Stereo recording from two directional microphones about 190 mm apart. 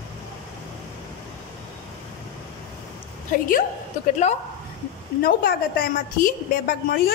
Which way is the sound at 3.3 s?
45° left (ahead or behind).